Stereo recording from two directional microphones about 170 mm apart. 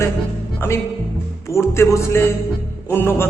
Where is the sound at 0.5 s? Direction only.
15° left (ahead or behind).